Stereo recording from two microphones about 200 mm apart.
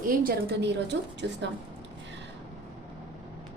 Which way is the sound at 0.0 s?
45° right (ahead or behind).